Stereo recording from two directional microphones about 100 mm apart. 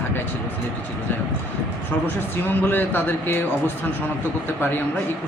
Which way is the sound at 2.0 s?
20° left (ahead or behind).